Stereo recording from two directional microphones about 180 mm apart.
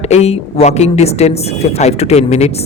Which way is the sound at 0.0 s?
35° left (ahead or behind).